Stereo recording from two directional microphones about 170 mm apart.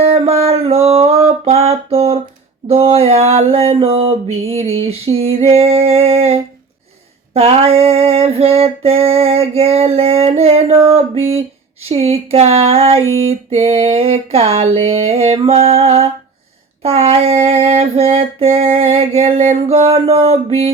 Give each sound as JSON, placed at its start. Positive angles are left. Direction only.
{"t": 0.0, "sound": "music", "side_deg": -35}
{"t": 2.6, "sound": "female singing", "side_deg": -35}